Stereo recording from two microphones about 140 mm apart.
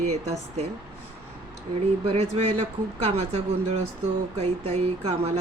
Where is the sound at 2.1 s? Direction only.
50° right (ahead or behind).